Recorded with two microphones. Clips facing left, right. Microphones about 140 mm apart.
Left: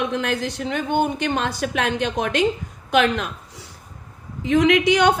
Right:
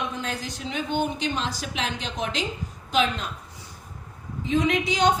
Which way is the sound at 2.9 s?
70° left (ahead or behind).